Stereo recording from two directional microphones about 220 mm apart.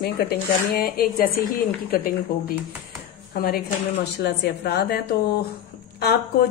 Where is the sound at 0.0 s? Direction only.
45° left (ahead or behind).